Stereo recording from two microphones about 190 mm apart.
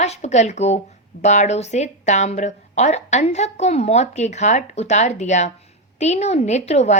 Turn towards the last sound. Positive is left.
turn(degrees=35)  # may be behind; listen again after turning